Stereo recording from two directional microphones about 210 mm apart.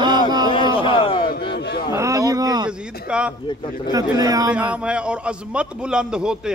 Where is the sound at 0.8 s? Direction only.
25° left (ahead or behind).